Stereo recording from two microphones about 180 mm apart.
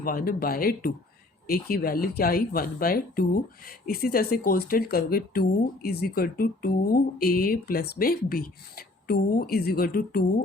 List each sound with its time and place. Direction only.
0.0 s speech: 55° left (ahead or behind)